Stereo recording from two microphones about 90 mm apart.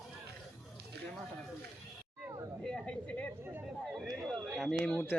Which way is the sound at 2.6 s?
5° left (ahead or behind).